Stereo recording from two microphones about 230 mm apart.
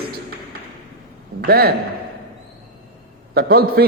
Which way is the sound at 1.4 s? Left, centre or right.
Right.